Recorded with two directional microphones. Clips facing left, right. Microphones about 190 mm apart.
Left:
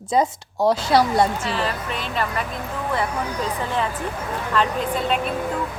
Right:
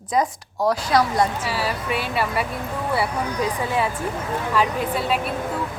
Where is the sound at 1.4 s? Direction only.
10° right (ahead or behind).